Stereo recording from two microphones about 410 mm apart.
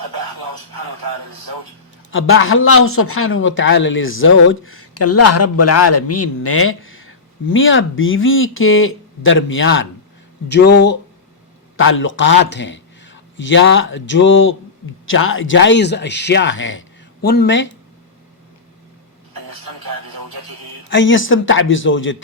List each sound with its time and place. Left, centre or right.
0.0 s speech: right
2.0 s a man's voice: left
19.3 s radio: right
20.9 s a man's voice: left